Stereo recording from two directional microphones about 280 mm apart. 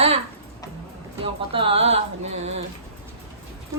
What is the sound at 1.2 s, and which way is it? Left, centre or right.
Speech, centre.